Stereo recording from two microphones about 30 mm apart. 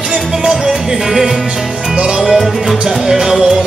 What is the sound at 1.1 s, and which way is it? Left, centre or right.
Music, centre.